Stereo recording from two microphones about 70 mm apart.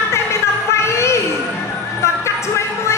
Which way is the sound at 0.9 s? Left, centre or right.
Left.